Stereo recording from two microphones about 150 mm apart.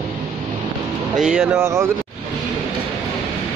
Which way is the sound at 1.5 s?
20° right (ahead or behind).